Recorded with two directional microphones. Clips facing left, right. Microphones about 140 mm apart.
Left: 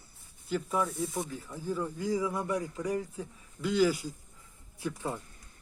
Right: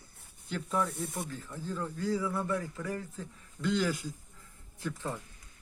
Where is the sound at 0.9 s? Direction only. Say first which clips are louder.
Left 3 dB; 60° right (ahead or behind).